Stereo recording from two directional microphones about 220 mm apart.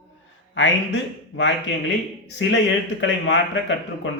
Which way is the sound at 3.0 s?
55° left (ahead or behind).